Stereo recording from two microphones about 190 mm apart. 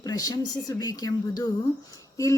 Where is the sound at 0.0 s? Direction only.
20° left (ahead or behind).